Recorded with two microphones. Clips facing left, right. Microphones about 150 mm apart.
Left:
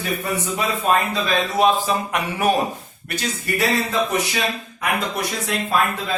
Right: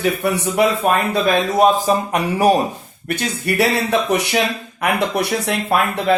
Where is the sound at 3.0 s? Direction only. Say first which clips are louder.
Right 5 dB; 65° right (ahead or behind).